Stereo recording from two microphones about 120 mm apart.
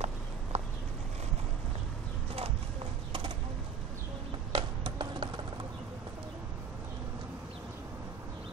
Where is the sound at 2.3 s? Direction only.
55° right (ahead or behind).